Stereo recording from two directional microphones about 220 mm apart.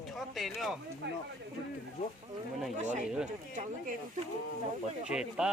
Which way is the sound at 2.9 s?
5° right (ahead or behind).